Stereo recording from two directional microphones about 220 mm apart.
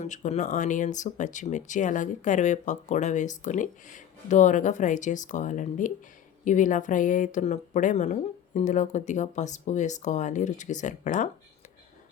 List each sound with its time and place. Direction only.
0.0 s speech: 30° left (ahead or behind)